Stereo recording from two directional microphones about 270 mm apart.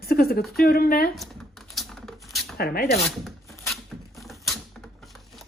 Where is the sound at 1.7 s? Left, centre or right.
Centre.